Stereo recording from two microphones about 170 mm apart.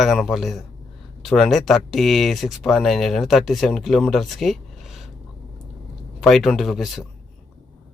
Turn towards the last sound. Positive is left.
turn(degrees=0)  # may be behind; listen again after turning